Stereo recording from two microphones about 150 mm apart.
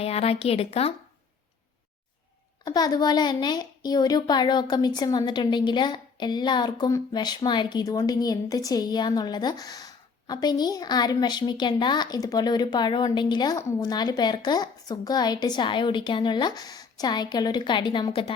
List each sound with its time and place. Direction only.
0.0 s speech: 40° left (ahead or behind)
2.6 s a child's voice: 25° left (ahead or behind)